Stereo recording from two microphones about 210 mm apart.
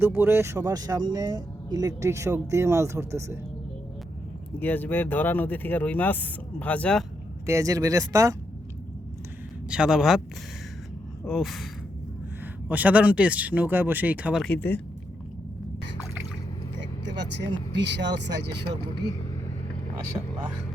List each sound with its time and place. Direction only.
0.0 s speech: 10° right (ahead or behind)
4.6 s speech: 10° left (ahead or behind)
7.4 s speech: 15° right (ahead or behind)
9.6 s speech: 5° right (ahead or behind)
11.3 s speech: centre (ahead or behind)
12.6 s speech: 5° right (ahead or behind)
14.4 s speech: 5° left (ahead or behind)
17.2 s speech: 55° right (ahead or behind)
20.1 s speech: 20° right (ahead or behind)